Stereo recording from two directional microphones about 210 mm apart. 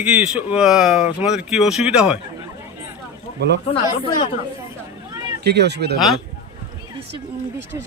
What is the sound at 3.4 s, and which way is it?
Speech, 55° right (ahead or behind).